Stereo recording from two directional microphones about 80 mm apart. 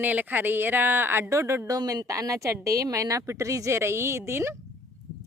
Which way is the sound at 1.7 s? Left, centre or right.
Right.